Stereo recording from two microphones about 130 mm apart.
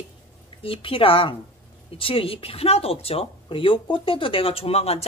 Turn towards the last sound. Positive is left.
turn(degrees=50)  # may be behind; listen again after turning